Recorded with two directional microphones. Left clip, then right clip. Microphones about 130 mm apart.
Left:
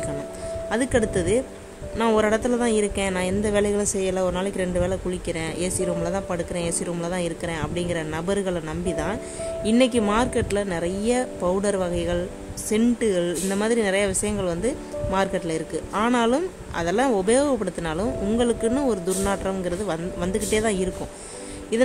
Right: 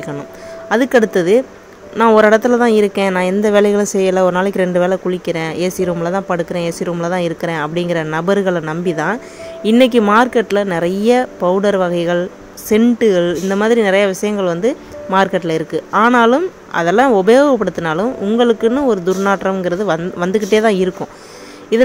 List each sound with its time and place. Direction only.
0.7 s a woman's voice: 15° right (ahead or behind)